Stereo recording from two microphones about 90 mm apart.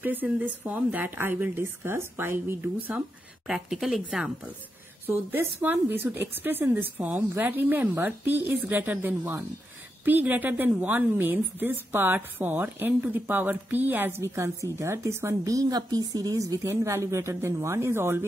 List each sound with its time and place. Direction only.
0.0 s a woman's voice: 20° right (ahead or behind)
3.4 s speech: 5° right (ahead or behind)
5.0 s a woman's voice: 25° right (ahead or behind)